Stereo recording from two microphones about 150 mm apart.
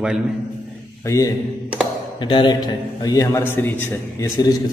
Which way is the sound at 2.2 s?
30° left (ahead or behind).